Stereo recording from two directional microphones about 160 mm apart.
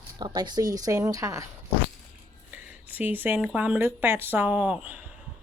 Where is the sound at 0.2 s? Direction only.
25° right (ahead or behind).